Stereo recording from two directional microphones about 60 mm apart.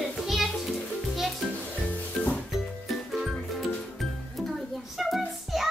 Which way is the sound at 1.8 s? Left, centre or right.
Left.